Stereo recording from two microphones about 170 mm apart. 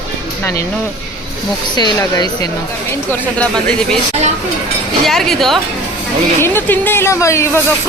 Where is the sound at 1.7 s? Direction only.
25° left (ahead or behind).